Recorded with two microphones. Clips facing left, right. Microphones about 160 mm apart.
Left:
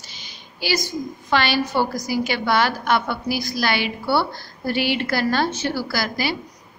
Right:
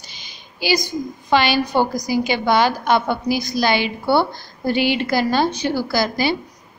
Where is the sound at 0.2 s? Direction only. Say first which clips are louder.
Right 4 dB; 15° right (ahead or behind).